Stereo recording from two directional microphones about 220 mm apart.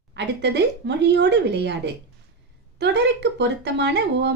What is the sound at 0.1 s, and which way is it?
Speech, 50° right (ahead or behind).